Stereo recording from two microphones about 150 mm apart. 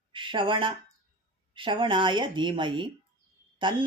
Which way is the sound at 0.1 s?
35° right (ahead or behind).